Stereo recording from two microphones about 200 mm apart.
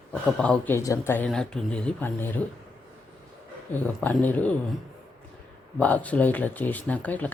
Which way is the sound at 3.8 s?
10° left (ahead or behind).